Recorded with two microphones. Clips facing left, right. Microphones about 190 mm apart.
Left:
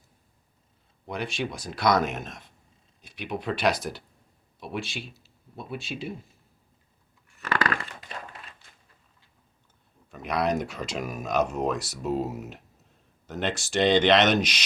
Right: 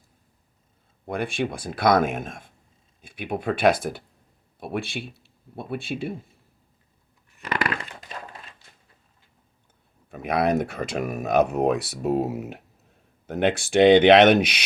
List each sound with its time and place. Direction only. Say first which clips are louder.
1.0 s speech: right 5 dB; 55° right (ahead or behind)
7.4 s a sound: even; 20° right (ahead or behind)
10.1 s speech: right 4 dB; 55° right (ahead or behind)